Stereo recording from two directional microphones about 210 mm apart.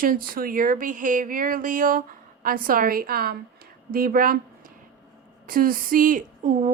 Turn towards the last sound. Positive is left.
turn(degrees=-40)  # may be behind; listen again after turning